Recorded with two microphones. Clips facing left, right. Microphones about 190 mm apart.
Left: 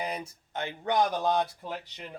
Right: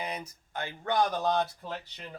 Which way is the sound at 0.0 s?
35° left (ahead or behind).